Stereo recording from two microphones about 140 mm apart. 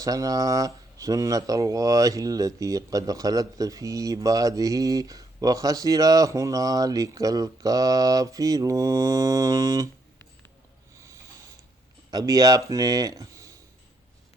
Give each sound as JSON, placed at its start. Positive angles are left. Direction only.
{"t": 0.0, "sound": "speech", "side_deg": -25}
{"t": 10.9, "sound": "snort", "side_deg": -20}
{"t": 12.1, "sound": "speech", "side_deg": -25}